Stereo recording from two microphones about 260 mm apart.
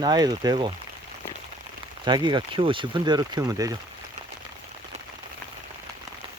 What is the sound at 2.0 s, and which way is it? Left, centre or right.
Speech, centre.